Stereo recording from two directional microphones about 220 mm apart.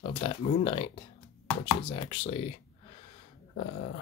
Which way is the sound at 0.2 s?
25° left (ahead or behind).